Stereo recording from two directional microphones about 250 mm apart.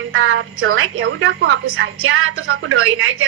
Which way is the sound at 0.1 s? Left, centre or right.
Right.